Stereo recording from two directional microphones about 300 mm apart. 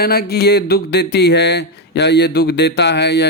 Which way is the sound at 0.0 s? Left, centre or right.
Left.